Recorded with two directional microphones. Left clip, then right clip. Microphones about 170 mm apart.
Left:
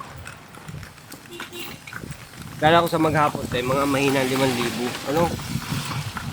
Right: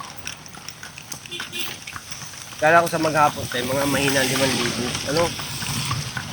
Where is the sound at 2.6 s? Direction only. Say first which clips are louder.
Right 1 dB; 25° left (ahead or behind).